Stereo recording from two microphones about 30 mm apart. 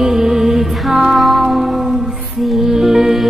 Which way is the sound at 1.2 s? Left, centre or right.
Centre.